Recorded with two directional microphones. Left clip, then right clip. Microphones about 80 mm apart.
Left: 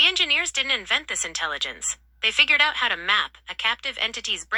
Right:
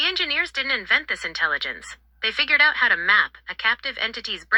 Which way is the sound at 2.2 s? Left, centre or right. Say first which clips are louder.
Even; left.